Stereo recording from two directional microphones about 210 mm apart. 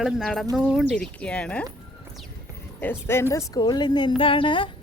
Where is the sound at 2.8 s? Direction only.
10° left (ahead or behind).